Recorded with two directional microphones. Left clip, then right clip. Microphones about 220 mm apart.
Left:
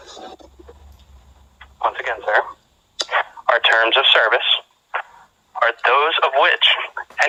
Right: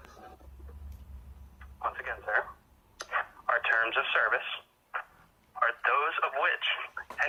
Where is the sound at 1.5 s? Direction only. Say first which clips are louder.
Left 13 dB; 55° left (ahead or behind).